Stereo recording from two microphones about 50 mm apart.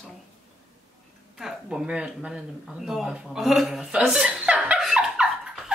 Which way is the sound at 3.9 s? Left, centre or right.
Centre.